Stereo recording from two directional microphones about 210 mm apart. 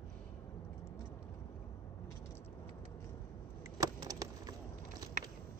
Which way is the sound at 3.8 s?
15° right (ahead or behind).